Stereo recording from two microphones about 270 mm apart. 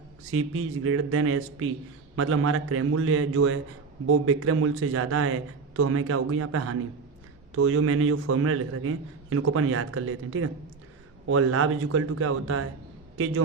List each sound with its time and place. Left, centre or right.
0.3 s a man's voice: right